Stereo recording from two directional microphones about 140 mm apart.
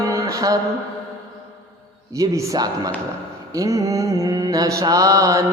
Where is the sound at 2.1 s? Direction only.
25° right (ahead or behind).